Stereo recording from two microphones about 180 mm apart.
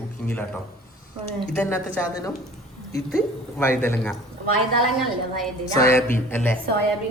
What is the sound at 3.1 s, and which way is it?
Mantra, 15° left (ahead or behind).